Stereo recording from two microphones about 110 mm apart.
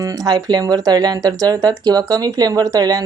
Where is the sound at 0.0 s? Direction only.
35° right (ahead or behind).